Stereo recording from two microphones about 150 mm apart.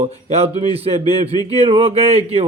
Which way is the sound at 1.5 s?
40° right (ahead or behind).